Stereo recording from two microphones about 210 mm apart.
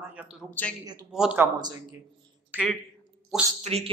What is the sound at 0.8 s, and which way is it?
Speech, 20° right (ahead or behind).